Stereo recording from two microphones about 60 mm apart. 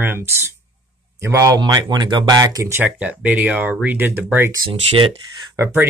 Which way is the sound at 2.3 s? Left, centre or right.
Right.